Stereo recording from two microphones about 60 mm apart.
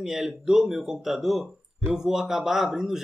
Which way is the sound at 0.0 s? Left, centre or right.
Centre.